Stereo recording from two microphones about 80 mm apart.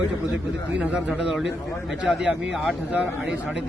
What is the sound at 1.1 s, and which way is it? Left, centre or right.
A man's voice, centre.